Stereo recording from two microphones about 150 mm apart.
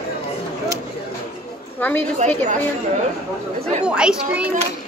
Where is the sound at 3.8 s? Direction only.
5° right (ahead or behind).